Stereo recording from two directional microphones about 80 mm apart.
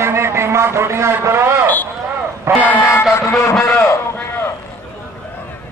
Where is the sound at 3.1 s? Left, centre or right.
Left.